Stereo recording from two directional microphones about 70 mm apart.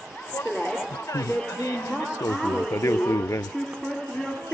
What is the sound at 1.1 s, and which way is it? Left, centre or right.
Speech, left.